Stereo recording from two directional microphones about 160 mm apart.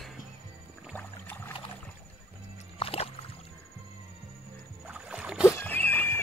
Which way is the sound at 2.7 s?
35° left (ahead or behind).